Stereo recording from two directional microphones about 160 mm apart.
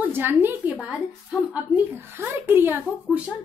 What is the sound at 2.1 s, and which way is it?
Speech, 15° right (ahead or behind).